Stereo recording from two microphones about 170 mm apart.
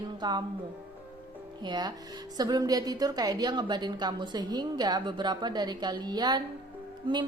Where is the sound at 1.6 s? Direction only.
25° right (ahead or behind).